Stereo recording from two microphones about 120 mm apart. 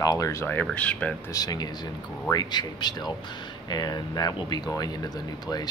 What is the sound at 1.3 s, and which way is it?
Speech, 30° left (ahead or behind).